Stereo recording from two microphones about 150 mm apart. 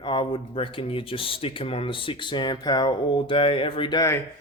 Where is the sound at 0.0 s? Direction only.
35° left (ahead or behind).